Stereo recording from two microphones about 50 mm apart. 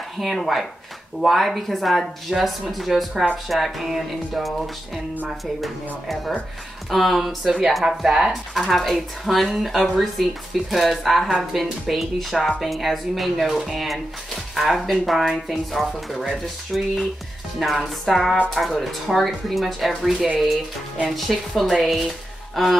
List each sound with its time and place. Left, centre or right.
0.2 s speech: centre
20.0 s speech: centre
21.1 s speech: centre